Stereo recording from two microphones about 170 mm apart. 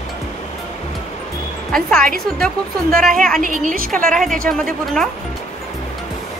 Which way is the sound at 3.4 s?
50° right (ahead or behind).